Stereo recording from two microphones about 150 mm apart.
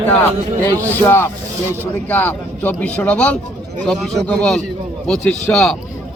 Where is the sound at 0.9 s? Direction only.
15° left (ahead or behind).